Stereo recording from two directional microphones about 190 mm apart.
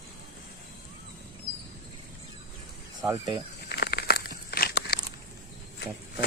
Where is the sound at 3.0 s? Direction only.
20° right (ahead or behind).